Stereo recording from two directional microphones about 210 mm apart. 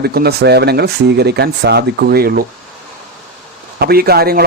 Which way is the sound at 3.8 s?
45° right (ahead or behind).